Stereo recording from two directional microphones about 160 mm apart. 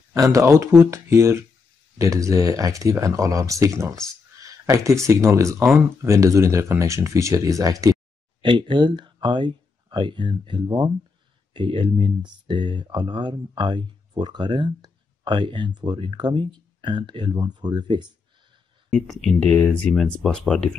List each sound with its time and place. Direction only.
0.1 s speech: 20° right (ahead or behind)
18.9 s speech: 5° left (ahead or behind)